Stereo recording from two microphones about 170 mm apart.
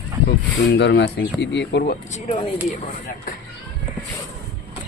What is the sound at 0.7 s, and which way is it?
Speech, 90° left.